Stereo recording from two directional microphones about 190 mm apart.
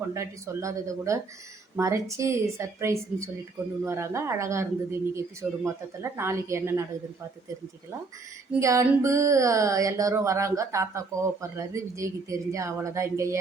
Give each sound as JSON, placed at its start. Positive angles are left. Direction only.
{"t": 0.1, "sound": "speech", "side_deg": -15}
{"t": 8.5, "sound": "speech", "side_deg": -15}